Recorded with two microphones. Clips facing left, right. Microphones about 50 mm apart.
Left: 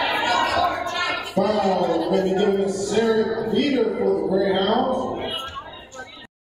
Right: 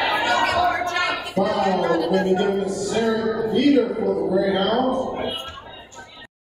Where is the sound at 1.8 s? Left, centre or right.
Right.